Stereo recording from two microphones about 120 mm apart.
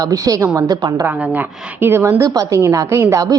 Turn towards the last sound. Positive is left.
turn(degrees=-25)  # may be behind; listen again after turning